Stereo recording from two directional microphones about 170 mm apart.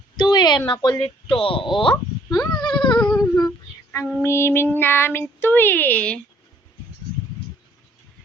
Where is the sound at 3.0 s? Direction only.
20° left (ahead or behind).